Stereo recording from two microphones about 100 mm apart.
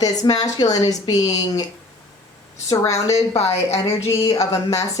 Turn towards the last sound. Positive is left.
turn(degrees=35)  # may be behind; listen again after turning